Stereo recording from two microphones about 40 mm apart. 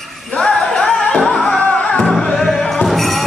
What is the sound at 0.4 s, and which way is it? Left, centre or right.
Music, left.